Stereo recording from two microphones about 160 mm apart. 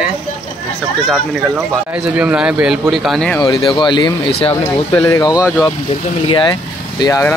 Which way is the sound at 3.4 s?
35° left (ahead or behind).